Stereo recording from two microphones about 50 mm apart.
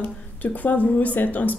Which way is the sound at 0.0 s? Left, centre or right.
Left.